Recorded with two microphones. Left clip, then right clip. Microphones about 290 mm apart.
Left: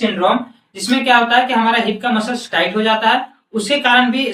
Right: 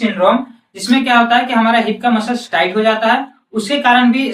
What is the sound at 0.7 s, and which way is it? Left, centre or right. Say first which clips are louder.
Speech: even; centre.